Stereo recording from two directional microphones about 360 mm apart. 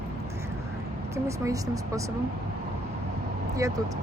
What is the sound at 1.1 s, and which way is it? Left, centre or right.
Speech, centre.